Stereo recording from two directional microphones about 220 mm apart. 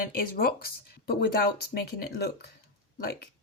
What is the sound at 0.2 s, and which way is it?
Speech, 45° left (ahead or behind).